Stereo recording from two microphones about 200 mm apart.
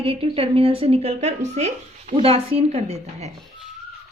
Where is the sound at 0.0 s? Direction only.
25° right (ahead or behind).